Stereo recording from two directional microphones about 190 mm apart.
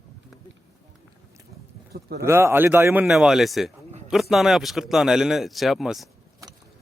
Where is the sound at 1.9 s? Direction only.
55° right (ahead or behind).